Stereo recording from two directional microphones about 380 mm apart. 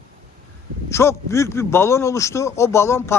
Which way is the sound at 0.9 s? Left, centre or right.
Centre.